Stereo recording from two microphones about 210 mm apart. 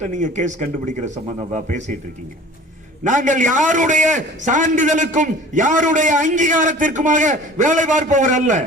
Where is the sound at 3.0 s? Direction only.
35° right (ahead or behind).